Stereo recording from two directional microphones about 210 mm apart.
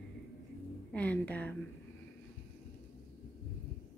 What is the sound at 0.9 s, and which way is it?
Speech, 5° left (ahead or behind).